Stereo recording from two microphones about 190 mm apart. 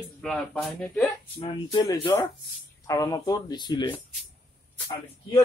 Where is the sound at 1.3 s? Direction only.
20° left (ahead or behind).